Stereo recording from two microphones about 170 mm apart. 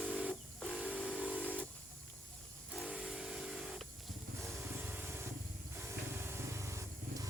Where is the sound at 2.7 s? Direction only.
Centre (ahead or behind).